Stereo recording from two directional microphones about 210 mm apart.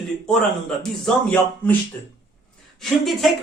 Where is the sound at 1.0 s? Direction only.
10° left (ahead or behind).